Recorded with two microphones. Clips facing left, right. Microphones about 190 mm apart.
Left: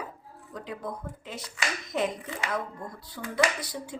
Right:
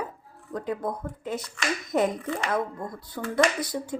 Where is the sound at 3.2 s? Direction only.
50° right (ahead or behind).